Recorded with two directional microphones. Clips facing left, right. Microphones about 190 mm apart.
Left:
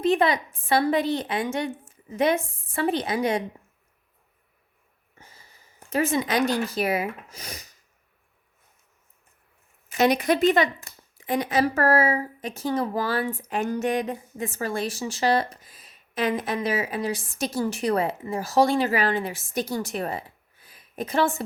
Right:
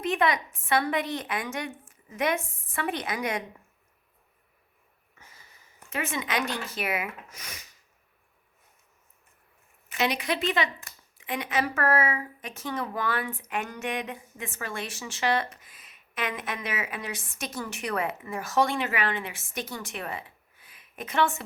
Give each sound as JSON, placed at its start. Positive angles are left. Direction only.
{"t": 0.0, "sound": "speech", "side_deg": 30}
{"t": 5.1, "sound": "speech", "side_deg": 30}
{"t": 10.0, "sound": "a woman's voice", "side_deg": 45}